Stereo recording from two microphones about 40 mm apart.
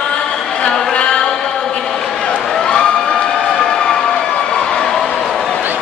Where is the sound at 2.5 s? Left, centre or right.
Centre.